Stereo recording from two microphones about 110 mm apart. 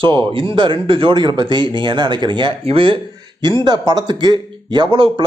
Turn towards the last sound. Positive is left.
turn(degrees=-50)  # may be behind; listen again after turning